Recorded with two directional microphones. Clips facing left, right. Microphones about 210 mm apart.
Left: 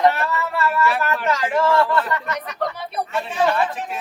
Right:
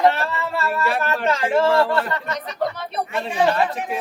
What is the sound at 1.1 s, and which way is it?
Speech, 30° right (ahead or behind).